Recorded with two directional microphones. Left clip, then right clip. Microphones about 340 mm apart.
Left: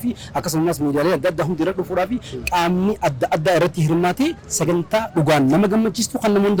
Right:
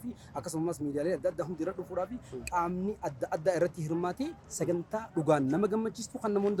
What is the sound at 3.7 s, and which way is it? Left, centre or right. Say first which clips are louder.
A man's voice: left 14 dB; left.